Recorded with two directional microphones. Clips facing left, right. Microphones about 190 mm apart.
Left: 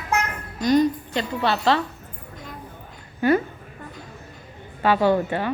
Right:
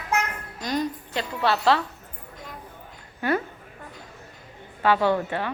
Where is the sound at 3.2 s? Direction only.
20° left (ahead or behind).